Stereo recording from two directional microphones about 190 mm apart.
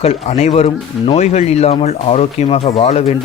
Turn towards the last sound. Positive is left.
turn(degrees=35)  # may be behind; listen again after turning